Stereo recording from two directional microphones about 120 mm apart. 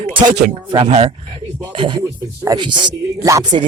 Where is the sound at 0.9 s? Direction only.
55° right (ahead or behind).